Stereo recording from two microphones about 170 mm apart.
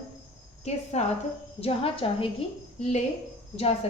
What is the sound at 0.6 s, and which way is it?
A woman's voice, 40° left (ahead or behind).